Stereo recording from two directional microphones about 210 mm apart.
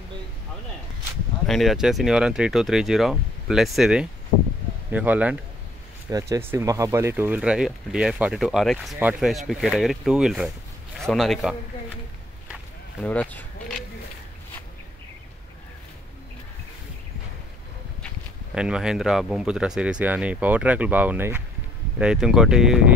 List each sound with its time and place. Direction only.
1.5 s speech: centre (ahead or behind)
13.0 s a sound: 5° left (ahead or behind)
18.5 s speech: 5° right (ahead or behind)